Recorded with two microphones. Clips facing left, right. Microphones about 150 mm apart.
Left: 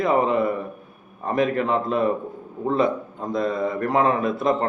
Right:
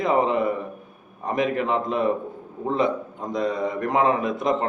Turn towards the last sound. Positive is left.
turn(degrees=-20)  # may be behind; listen again after turning